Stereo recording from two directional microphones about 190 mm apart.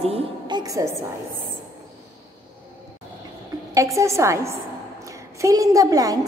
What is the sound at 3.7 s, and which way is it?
A woman's voice, 15° right (ahead or behind).